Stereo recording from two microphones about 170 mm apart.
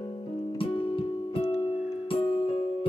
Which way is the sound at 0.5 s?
30° left (ahead or behind).